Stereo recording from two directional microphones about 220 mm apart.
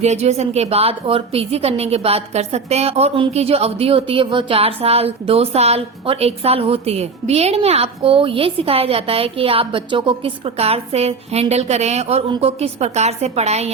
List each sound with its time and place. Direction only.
0.0 s a woman's voice: 30° right (ahead or behind)